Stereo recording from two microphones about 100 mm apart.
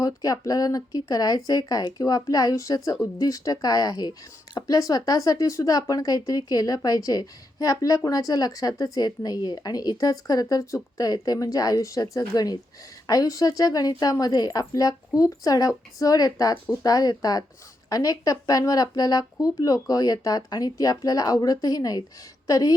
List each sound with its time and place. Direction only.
0.0 s speech: 35° left (ahead or behind)